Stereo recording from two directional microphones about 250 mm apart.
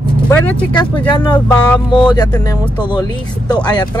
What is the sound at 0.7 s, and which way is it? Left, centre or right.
Speech, centre.